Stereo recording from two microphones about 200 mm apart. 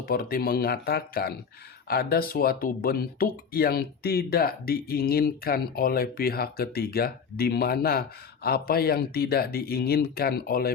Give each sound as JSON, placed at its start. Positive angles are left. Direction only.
{"t": 0.0, "sound": "speech", "side_deg": 45}